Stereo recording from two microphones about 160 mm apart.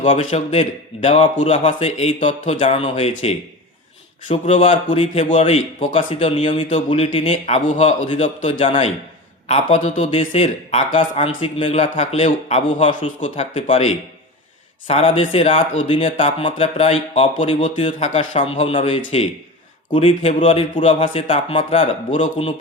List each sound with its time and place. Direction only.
0.0 s speech: 50° left (ahead or behind)
4.3 s speech: 40° left (ahead or behind)